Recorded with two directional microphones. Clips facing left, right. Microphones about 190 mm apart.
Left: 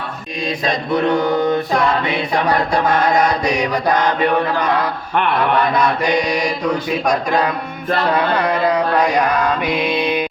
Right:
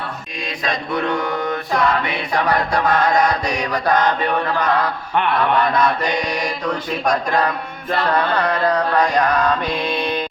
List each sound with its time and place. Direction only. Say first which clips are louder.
1.2 s mantra: left 6 dB; 35° left (ahead or behind); by 3.9 s 20° left (ahead or behind)
7.3 s carnatic music: left 2 dB; 10° left (ahead or behind)
9.6 s mantra: left 3 dB; 15° left (ahead or behind)